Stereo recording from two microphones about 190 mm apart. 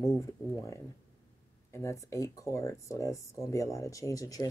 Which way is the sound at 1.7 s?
15° left (ahead or behind).